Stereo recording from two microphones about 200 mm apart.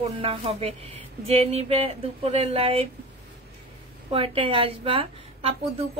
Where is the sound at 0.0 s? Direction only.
30° right (ahead or behind).